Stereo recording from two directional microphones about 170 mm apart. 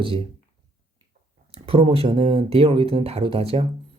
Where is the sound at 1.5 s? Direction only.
35° right (ahead or behind).